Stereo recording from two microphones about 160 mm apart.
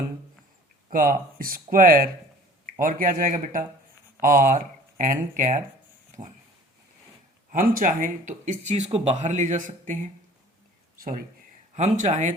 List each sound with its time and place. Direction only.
0.9 s speech: 60° right (ahead or behind)
6.1 s dog: 50° right (ahead or behind)
7.5 s speech: 60° right (ahead or behind)
11.7 s speech: 50° right (ahead or behind)